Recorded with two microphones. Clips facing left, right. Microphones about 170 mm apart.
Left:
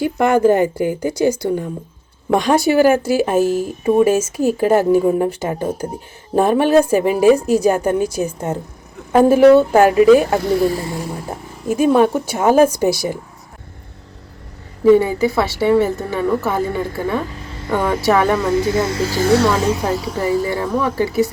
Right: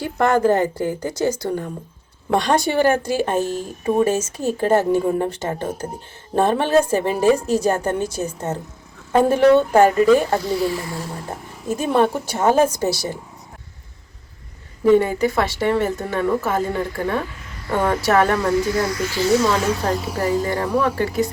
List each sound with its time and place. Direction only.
0.0 s speech: 10° left (ahead or behind)
10.4 s speech: 50° left (ahead or behind)
10.9 s speech: 10° left (ahead or behind)
14.9 s speech: 10° left (ahead or behind)
17.3 s a sound: 30° left (ahead or behind)
17.7 s speech: 15° left (ahead or behind)
19.6 s speech: 15° left (ahead or behind)
19.9 s speech: centre (ahead or behind)
20.4 s speech: 10° left (ahead or behind)